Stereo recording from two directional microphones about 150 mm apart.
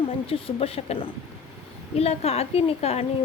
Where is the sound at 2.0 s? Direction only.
45° left (ahead or behind).